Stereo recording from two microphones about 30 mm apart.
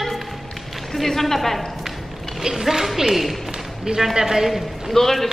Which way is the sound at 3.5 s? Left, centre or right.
Right.